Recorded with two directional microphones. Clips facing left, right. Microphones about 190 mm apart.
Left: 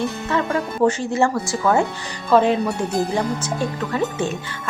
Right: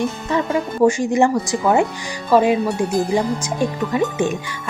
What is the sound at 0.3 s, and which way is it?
Speech, 15° right (ahead or behind).